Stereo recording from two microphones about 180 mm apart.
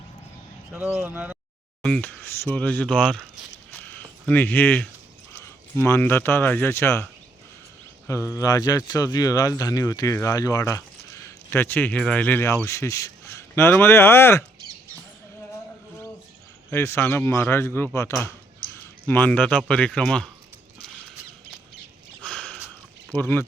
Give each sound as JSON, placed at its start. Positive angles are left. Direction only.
{"t": 0.7, "sound": "speech", "side_deg": -10}
{"t": 1.8, "sound": "speech", "side_deg": 5}
{"t": 3.8, "sound": "a sound", "side_deg": 10}
{"t": 4.3, "sound": "speech", "side_deg": 10}
{"t": 16.6, "sound": "speech", "side_deg": 15}
{"t": 22.2, "sound": "sniff", "side_deg": 5}
{"t": 23.1, "sound": "speech", "side_deg": 10}